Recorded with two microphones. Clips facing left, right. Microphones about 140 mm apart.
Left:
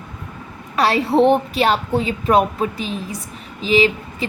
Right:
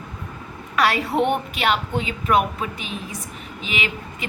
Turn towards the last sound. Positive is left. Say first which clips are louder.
# left 11 dB
turn(degrees=35)  # may be behind; listen again after turning